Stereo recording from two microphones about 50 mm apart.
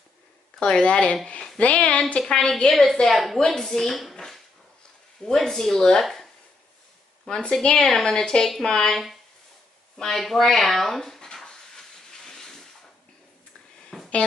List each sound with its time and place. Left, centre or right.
0.6 s a woman's voice: centre
2.7 s a woman's voice: centre
7.2 s speech: centre
11.4 s steam: centre
13.9 s music: centre